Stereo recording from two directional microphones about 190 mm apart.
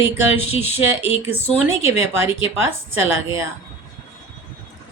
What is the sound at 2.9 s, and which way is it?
Speech, 10° right (ahead or behind).